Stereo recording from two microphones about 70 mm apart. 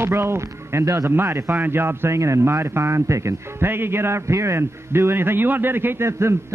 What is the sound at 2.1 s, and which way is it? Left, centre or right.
Speech, right.